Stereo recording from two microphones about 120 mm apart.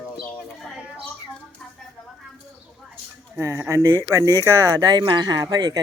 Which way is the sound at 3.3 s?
25° right (ahead or behind).